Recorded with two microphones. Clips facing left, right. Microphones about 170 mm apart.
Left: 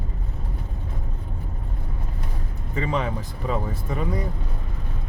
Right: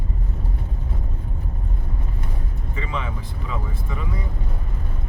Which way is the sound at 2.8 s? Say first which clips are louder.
Left 5 dB; 40° left (ahead or behind).